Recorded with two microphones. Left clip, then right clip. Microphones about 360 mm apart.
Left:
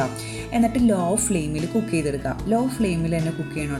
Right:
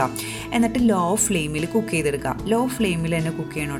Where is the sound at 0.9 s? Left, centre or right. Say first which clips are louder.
Right 2 dB; right.